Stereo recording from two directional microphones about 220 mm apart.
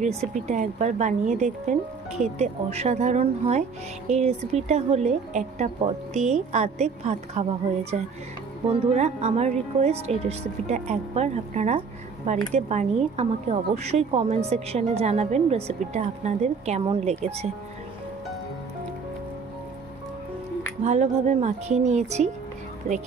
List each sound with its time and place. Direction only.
0.0 s a woman's voice: 30° right (ahead or behind)
20.8 s speech: 30° right (ahead or behind)